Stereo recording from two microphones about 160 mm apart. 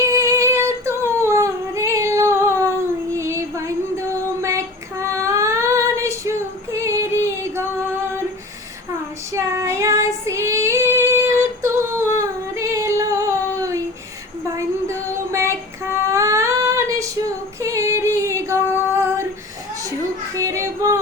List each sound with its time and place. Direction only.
0.1 s singing: 20° right (ahead or behind)
3.2 s child singing: 15° right (ahead or behind)
6.8 s music: 20° right (ahead or behind)
9.3 s female singing: 20° right (ahead or behind)
14.5 s child singing: 20° right (ahead or behind)
17.6 s a sound: 20° right (ahead or behind)
20.3 s yodeling: 20° right (ahead or behind)